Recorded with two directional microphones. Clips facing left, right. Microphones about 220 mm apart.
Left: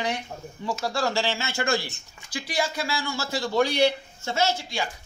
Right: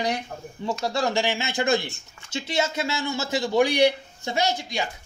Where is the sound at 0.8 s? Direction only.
20° right (ahead or behind).